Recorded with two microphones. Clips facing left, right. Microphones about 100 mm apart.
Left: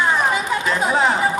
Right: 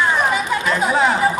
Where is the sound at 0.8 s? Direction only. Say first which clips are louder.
Right 1 dB; 30° left (ahead or behind).